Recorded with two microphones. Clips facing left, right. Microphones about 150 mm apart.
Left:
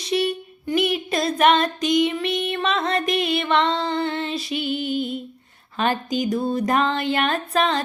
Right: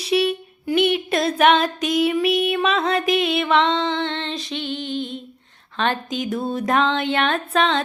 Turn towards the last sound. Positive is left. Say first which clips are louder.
# right 1 dB
turn(degrees=0)  # may be behind; listen again after turning